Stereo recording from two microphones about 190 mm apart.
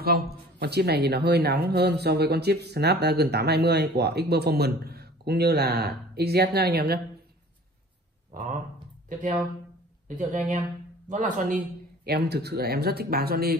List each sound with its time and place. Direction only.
0.0 s speech: 55° right (ahead or behind)
8.3 s a sound: 45° right (ahead or behind)
10.0 s speech: 40° right (ahead or behind)
12.0 s speech: 55° right (ahead or behind)